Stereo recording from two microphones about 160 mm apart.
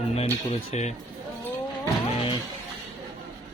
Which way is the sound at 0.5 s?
45° left (ahead or behind).